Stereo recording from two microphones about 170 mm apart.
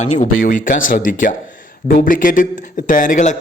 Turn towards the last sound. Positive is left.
turn(degrees=45)  # may be behind; listen again after turning